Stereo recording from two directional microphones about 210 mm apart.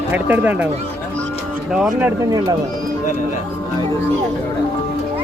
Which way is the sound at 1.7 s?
5° right (ahead or behind).